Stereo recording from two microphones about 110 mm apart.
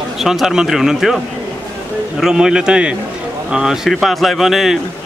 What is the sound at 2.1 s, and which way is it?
A man's voice, 5° right (ahead or behind).